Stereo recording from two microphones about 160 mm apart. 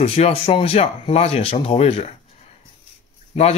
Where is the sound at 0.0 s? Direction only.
40° left (ahead or behind).